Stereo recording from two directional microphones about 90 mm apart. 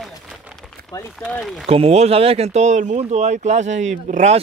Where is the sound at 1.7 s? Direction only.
90° right.